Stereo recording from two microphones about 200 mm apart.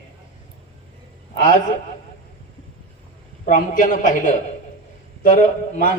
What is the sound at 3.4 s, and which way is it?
A man's voice, 40° left (ahead or behind).